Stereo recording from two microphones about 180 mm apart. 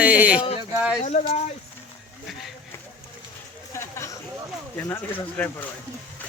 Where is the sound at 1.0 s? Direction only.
35° left (ahead or behind).